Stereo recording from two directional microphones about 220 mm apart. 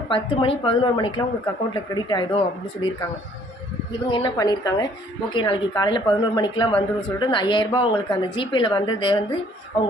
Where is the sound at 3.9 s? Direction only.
20° left (ahead or behind).